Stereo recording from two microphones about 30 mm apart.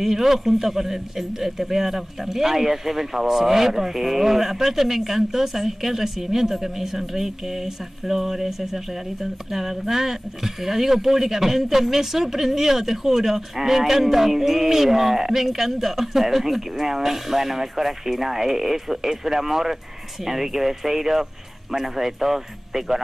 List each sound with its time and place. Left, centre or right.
0.0 s a man's voice: centre